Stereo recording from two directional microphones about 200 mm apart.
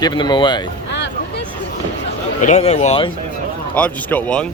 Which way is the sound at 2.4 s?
35° left (ahead or behind).